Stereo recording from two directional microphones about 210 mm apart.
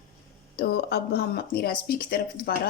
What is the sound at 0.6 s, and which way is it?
Speech, 50° left (ahead or behind).